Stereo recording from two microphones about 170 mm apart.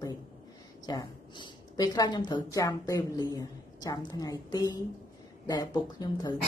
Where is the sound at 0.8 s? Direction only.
25° left (ahead or behind).